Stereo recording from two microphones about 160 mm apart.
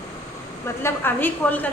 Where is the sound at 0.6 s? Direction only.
15° left (ahead or behind).